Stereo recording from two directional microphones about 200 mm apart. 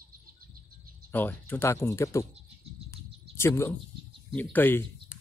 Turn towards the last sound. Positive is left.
turn(degrees=10)  # may be behind; listen again after turning